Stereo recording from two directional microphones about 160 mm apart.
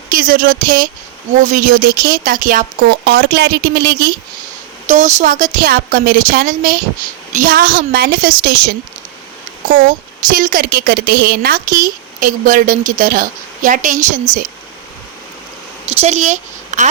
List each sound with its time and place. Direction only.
0.1 s speech: 60° right (ahead or behind)
3.1 s a woman's voice: 80° right
4.9 s a woman's voice: 45° right (ahead or behind)
16.0 s speech: 45° right (ahead or behind)